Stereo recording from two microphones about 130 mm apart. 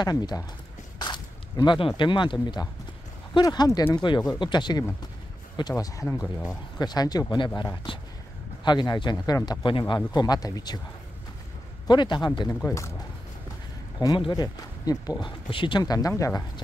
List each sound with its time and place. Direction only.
0.0 s speech: 30° left (ahead or behind)
0.9 s a sound: 35° left (ahead or behind)
3.3 s speech: 30° left (ahead or behind)
11.9 s speech: 35° left (ahead or behind)
12.6 s speech: 20° left (ahead or behind)
13.9 s speech: 30° left (ahead or behind)